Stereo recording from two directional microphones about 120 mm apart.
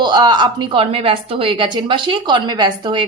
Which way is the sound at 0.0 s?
35° right (ahead or behind).